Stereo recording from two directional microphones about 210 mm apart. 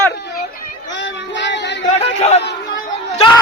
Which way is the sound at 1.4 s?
55° left (ahead or behind).